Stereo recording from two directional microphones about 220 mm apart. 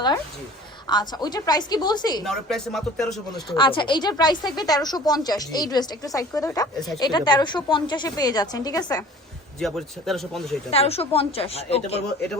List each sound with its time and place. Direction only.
0.9 s a woman's voice: 20° left (ahead or behind)
2.2 s speech: centre (ahead or behind)
3.5 s speech: 20° left (ahead or behind)
9.6 s speech: centre (ahead or behind)
10.7 s a woman's voice: 25° left (ahead or behind)